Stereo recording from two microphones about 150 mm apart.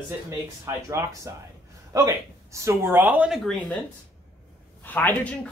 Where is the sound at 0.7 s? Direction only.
20° right (ahead or behind); by 3.8 s 5° left (ahead or behind).